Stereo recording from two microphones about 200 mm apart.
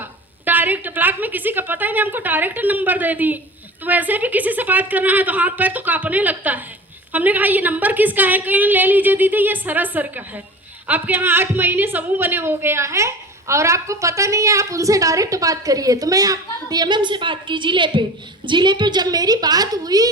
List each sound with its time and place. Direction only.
0.4 s a woman's voice: 10° right (ahead or behind)